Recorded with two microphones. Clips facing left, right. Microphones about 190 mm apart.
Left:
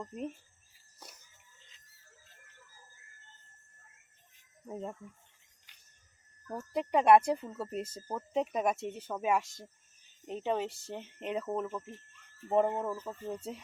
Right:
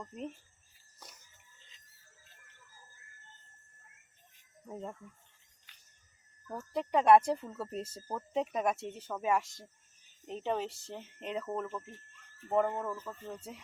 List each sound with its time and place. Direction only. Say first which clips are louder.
4.6 s speech: left 2 dB; 10° left (ahead or behind)
6.5 s a woman's voice: left 1 dB; 10° left (ahead or behind)
10.9 s speech: left 3 dB; 20° left (ahead or behind)
11.4 s speech: left 2 dB; 10° left (ahead or behind)
12.5 s speech: left 2 dB; 20° left (ahead or behind)